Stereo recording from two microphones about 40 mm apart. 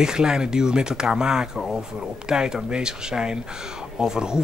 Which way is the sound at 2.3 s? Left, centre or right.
Centre.